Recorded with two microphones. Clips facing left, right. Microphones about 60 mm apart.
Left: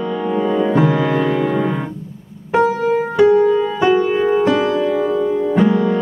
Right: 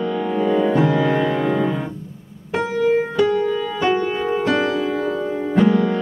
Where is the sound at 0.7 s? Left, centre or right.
Left.